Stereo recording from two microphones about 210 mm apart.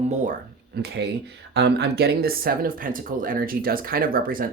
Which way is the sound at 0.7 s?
50° right (ahead or behind).